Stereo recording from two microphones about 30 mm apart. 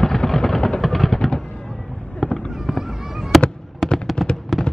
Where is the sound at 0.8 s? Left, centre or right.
Centre.